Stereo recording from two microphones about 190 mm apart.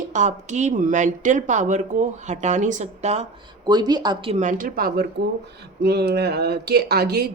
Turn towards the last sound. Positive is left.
turn(degrees=-55)  # may be behind; listen again after turning